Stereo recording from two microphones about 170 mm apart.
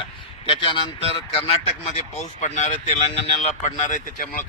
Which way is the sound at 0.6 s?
30° left (ahead or behind).